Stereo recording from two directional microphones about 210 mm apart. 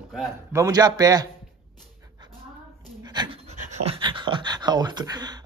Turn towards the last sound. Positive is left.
turn(degrees=-20)  # may be behind; listen again after turning